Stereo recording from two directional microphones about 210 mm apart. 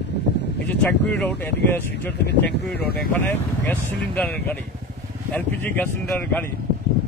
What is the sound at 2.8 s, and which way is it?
Speech, 50° left (ahead or behind).